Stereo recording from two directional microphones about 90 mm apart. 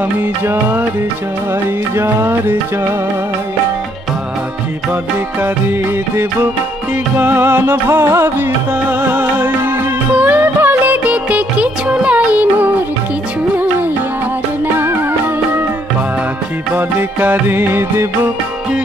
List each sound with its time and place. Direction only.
0.5 s music: 25° right (ahead or behind)
2.0 s music: 30° right (ahead or behind)
5.4 s music: 25° right (ahead or behind)
14.8 s music: 25° right (ahead or behind)
16.7 s music: 20° right (ahead or behind)